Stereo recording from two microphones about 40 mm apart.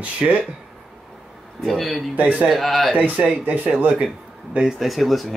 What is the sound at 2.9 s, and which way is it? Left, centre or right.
Speech, right.